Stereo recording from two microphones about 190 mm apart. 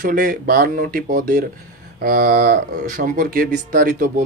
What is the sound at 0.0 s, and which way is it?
Speech, 45° right (ahead or behind).